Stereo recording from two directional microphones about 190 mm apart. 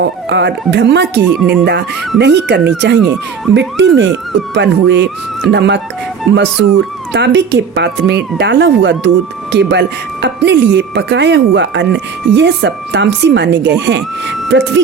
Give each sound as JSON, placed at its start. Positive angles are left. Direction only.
{"t": 0.0, "sound": "speech", "side_deg": -65}
{"t": 1.4, "sound": "speech", "side_deg": 0}
{"t": 1.6, "sound": "speech", "side_deg": -60}